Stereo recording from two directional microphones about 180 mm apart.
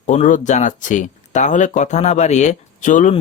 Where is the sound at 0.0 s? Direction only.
40° left (ahead or behind).